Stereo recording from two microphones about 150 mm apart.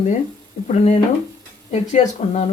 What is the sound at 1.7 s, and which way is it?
Speech, 50° left (ahead or behind).